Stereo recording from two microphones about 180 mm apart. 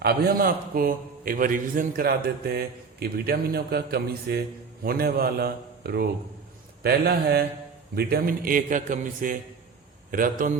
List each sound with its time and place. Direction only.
0.0 s a man's voice: 60° right (ahead or behind)